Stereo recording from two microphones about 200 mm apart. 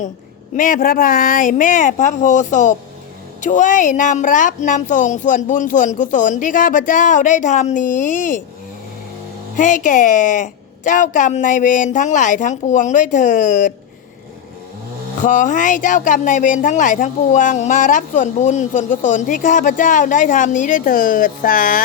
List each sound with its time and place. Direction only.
0.5 s speech: 40° left (ahead or behind)
9.6 s speech: 40° left (ahead or behind)
15.2 s speech: 40° left (ahead or behind)